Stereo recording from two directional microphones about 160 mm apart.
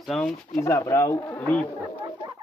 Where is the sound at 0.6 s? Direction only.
15° left (ahead or behind).